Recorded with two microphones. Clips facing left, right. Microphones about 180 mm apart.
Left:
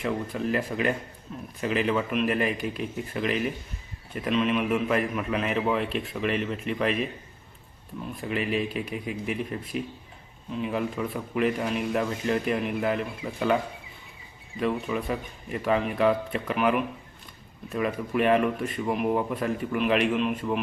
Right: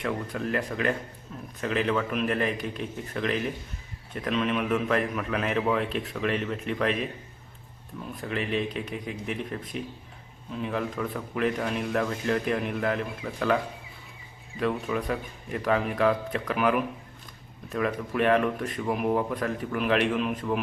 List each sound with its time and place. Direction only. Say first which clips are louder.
0.0 s a man's voice: left 2 dB; centre (ahead or behind)
8.2 s speech: left 1 dB; 5° left (ahead or behind)
14.6 s speech: even; centre (ahead or behind)